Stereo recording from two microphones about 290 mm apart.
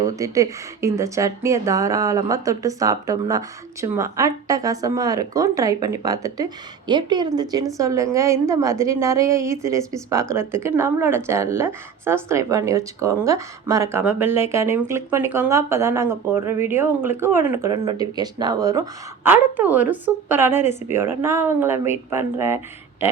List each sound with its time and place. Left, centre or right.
0.0 s a woman's voice: centre